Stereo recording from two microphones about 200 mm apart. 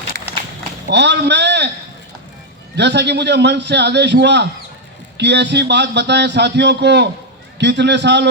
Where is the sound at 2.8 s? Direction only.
60° right (ahead or behind).